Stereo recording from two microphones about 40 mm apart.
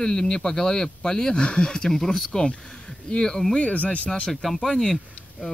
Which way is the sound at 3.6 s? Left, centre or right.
Left.